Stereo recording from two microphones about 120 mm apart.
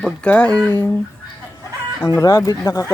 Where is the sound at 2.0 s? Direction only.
25° left (ahead or behind).